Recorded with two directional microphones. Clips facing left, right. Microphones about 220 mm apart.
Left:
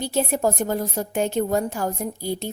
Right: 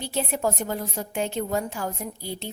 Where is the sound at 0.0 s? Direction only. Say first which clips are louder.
Left 4 dB; 45° left (ahead or behind).